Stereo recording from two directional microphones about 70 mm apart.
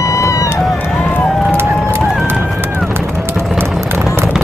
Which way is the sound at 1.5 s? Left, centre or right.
Right.